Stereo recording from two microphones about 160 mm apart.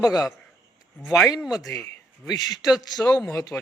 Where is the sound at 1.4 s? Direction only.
Centre (ahead or behind).